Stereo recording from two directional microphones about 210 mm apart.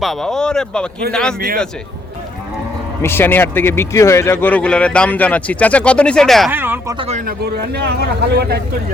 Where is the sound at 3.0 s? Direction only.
10° left (ahead or behind).